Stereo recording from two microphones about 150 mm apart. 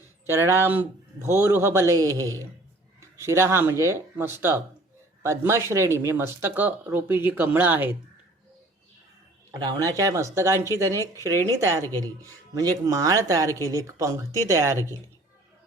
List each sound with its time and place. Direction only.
0.3 s speech: 20° right (ahead or behind)
9.5 s speech: 25° right (ahead or behind)